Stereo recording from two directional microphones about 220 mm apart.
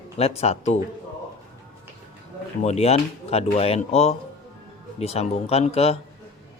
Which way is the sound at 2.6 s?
30° left (ahead or behind).